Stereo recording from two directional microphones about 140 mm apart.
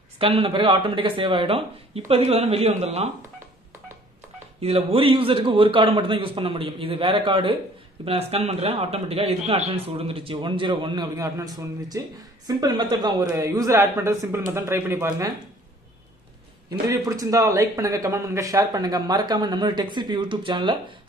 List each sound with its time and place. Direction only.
0.2 s a man's voice: 40° right (ahead or behind)
4.6 s a man's voice: 45° right (ahead or behind); by 15.3 s 20° right (ahead or behind)
16.8 s speech: 25° right (ahead or behind)